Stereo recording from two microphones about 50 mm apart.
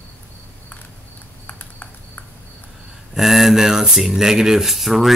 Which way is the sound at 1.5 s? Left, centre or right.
Left.